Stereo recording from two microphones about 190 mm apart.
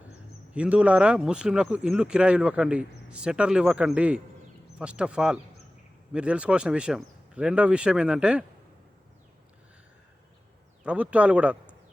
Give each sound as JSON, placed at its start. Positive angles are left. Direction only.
{"t": 0.5, "sound": "speech", "side_deg": -5}
{"t": 10.8, "sound": "a man's voice", "side_deg": -5}